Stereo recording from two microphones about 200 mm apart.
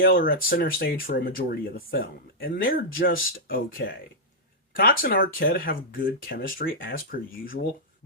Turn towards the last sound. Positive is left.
turn(degrees=45)  # may be behind; listen again after turning